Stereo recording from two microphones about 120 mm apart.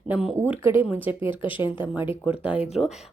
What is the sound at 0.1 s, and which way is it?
Speech, 5° right (ahead or behind).